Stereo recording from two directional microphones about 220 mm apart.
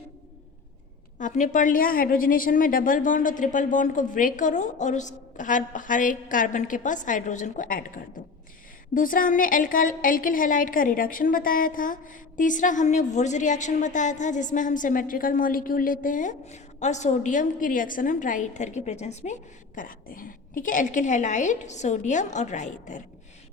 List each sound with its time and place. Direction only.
1.2 s a woman's voice: 35° left (ahead or behind)